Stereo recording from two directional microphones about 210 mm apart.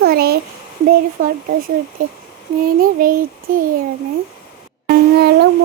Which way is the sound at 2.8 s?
45° right (ahead or behind).